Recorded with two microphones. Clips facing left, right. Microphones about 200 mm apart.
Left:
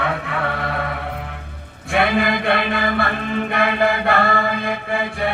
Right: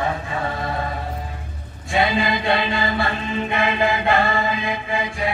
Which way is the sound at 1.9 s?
60° left (ahead or behind).